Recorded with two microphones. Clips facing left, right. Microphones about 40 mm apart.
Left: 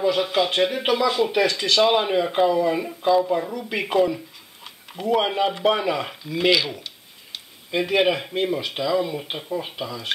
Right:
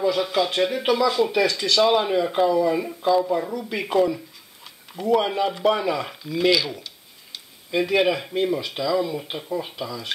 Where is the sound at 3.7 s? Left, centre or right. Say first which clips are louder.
Left 1 dB; centre.